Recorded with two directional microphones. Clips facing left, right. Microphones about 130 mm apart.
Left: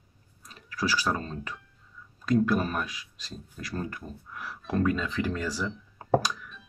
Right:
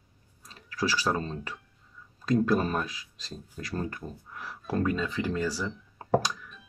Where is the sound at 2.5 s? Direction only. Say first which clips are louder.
Right 1 dB; 25° right (ahead or behind).